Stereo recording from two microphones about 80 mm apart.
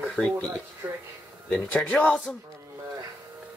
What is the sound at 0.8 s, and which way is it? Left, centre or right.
Speech, right.